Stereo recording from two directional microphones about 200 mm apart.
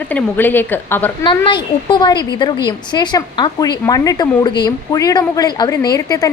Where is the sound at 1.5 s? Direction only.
25° left (ahead or behind).